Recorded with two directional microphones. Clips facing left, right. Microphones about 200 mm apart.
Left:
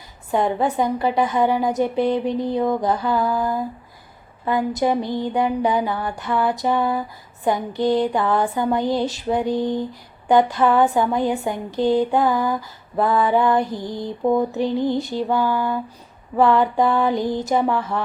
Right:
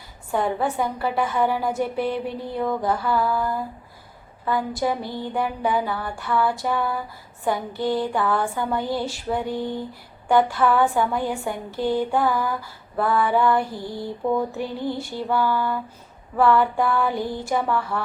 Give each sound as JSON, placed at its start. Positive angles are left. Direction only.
{"t": 0.3, "sound": "a woman's voice", "side_deg": 20}